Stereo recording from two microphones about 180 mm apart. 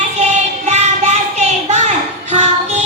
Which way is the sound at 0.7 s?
40° right (ahead or behind).